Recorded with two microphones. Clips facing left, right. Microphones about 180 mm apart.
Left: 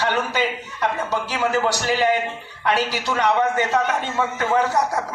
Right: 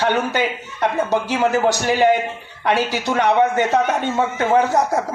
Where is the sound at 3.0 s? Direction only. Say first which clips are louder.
Right 4 dB; 50° right (ahead or behind).